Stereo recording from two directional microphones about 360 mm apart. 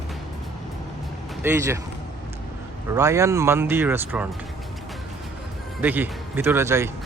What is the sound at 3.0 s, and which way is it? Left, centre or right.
Speech, centre.